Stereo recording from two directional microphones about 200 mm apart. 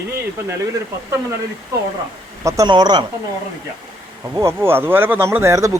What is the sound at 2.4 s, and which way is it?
Speech, 15° right (ahead or behind).